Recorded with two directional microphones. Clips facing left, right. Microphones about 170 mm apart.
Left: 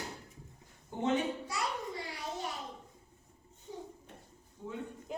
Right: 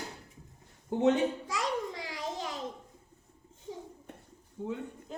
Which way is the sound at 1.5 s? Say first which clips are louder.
Right 4 dB; 90° right.